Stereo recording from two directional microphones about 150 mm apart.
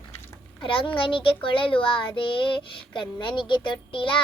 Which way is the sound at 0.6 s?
35° left (ahead or behind).